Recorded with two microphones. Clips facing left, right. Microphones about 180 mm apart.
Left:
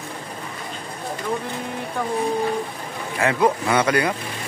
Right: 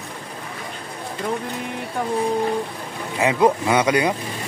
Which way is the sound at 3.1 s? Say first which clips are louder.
Right 2 dB; 20° right (ahead or behind).